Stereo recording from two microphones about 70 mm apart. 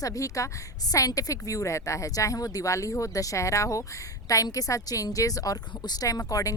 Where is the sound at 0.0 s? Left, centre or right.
Left.